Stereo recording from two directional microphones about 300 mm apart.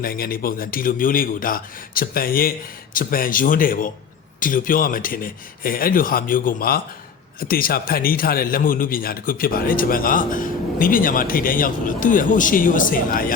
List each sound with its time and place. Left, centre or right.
0.0 s a man's voice: left